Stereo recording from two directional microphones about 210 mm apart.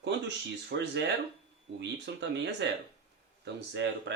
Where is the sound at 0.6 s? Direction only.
55° right (ahead or behind).